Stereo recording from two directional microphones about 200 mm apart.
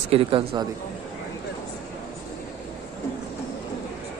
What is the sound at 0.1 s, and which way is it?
Speech, 25° right (ahead or behind).